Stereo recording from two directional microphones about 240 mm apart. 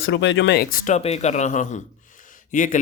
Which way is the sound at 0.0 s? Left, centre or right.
Left.